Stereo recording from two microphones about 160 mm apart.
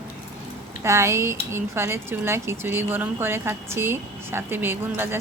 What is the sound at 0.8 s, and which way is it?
Speech, 15° right (ahead or behind).